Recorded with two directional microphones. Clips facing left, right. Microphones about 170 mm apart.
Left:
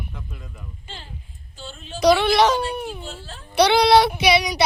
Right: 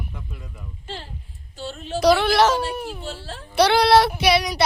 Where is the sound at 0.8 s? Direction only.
65° right (ahead or behind).